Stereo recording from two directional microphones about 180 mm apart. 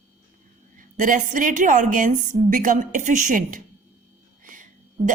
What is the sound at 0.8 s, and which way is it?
A woman's voice, 45° right (ahead or behind).